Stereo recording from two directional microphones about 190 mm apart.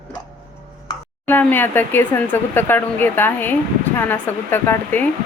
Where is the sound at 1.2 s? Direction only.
10° left (ahead or behind).